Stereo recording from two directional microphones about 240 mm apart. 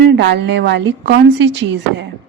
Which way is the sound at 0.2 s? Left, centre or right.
Right.